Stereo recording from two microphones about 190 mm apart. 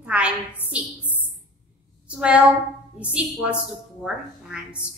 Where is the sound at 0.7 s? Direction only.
5° right (ahead or behind).